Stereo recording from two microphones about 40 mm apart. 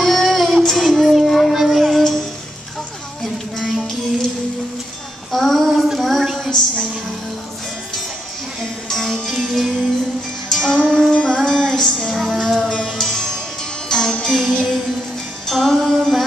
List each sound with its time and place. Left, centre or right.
0.0 s child singing: centre
1.5 s music: centre
3.7 s child singing: centre
5.3 s child singing: centre
5.9 s a sound: centre
8.8 s music: centre
12.1 s music: centre